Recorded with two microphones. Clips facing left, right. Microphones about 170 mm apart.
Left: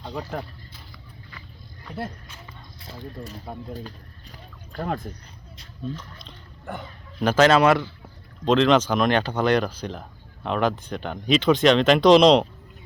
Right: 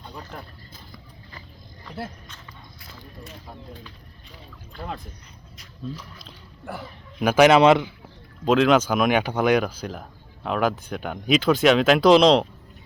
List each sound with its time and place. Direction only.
1.8 s speech: centre (ahead or behind)
3.7 s bird: 40° left (ahead or behind)
5.9 s speech: 5° right (ahead or behind)
8.4 s speech: 5° right (ahead or behind)